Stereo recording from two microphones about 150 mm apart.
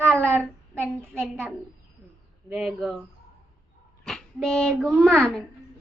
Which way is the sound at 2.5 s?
Centre (ahead or behind).